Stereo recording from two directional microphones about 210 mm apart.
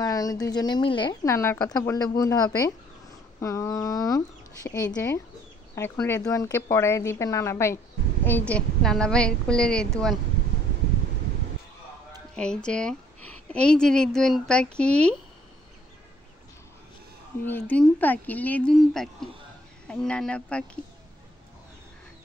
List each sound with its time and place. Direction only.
0.0 s a woman's voice: 15° left (ahead or behind)
12.4 s a woman's voice: 5° left (ahead or behind)
17.5 s a woman's voice: 10° left (ahead or behind)